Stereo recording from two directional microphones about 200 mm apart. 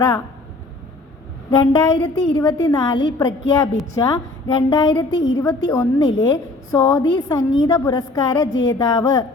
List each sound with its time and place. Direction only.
1.5 s a woman's voice: 20° left (ahead or behind)